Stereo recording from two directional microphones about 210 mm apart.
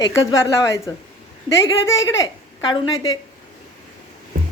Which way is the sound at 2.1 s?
20° left (ahead or behind).